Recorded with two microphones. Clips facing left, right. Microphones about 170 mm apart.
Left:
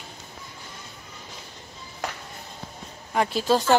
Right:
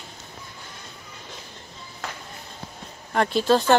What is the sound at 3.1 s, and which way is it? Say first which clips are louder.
Speech: right 2 dB; 5° left (ahead or behind).